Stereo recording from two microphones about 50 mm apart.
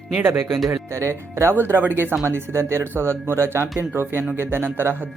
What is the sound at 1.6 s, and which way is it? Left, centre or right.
Speech, right.